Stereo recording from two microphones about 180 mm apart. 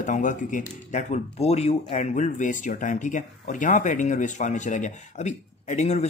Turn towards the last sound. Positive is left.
turn(degrees=40)  # may be behind; listen again after turning